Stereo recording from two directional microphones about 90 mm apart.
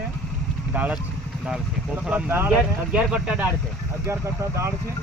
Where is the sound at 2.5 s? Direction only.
10° right (ahead or behind).